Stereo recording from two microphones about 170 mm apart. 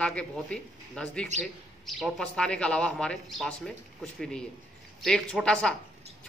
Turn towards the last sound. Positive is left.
turn(degrees=5)  # may be behind; listen again after turning